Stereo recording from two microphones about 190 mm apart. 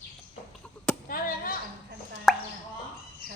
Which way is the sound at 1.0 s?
45° left (ahead or behind).